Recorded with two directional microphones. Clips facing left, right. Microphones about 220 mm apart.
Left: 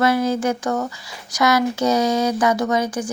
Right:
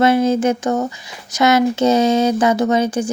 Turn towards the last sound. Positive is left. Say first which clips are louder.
# right 4 dB
turn(degrees=-25)  # may be behind; listen again after turning